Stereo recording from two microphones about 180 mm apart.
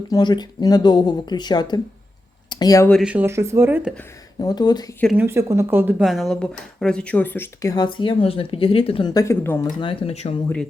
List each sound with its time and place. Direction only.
0.1 s speech: 25° left (ahead or behind)
3.0 s speech: 10° right (ahead or behind)
4.4 s speech: 20° left (ahead or behind)
5.1 s speech: 15° right (ahead or behind)
6.1 s speech: centre (ahead or behind)
9.6 s speech: 30° left (ahead or behind)